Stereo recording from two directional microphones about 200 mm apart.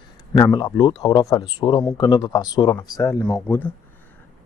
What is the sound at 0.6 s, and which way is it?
Speech, 20° left (ahead or behind).